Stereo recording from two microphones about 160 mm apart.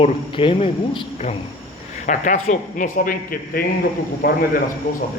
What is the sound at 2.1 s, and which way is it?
A man's voice, 50° left (ahead or behind).